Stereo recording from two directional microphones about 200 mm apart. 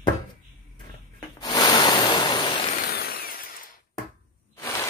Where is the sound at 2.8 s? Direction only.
50° left (ahead or behind).